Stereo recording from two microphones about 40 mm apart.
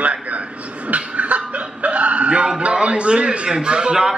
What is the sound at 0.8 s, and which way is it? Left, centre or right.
Chuckle, right.